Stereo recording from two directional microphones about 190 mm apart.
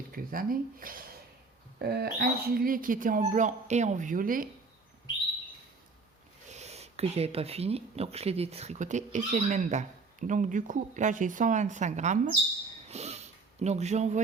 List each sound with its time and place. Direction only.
0.1 s speech: 50° right (ahead or behind)
6.5 s speech: 35° right (ahead or behind)
12.9 s sniff: 35° right (ahead or behind)